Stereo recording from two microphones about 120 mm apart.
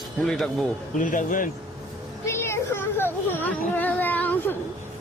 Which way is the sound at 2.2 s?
20° left (ahead or behind).